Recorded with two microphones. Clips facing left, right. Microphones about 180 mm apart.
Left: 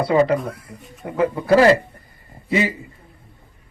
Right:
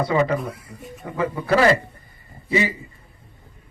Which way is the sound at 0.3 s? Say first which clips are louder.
Left 2 dB; centre (ahead or behind).